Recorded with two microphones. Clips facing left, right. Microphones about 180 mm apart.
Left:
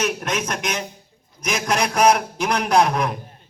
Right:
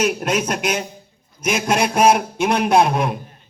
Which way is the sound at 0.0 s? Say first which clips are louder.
Right 4 dB; 30° right (ahead or behind).